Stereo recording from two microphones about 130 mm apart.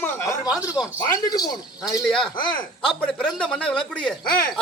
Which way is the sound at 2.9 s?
5° left (ahead or behind).